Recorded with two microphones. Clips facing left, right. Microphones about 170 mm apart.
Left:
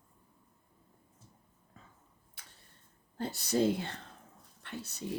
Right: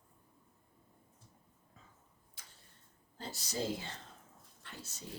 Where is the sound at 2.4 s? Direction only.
65° left (ahead or behind).